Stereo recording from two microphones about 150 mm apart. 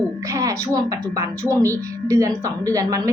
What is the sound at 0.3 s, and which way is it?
Music, 20° right (ahead or behind).